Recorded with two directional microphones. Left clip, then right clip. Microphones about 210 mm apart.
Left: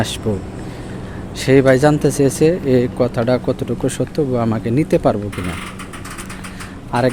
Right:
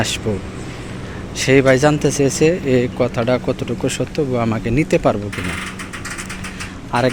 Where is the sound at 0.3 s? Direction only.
15° left (ahead or behind).